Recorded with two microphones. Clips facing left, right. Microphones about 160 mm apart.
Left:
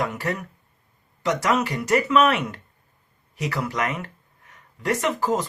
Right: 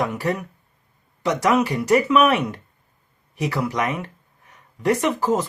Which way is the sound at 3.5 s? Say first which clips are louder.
Right 2 dB; 20° right (ahead or behind).